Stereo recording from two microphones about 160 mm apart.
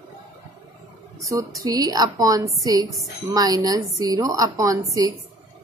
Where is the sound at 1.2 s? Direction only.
20° right (ahead or behind).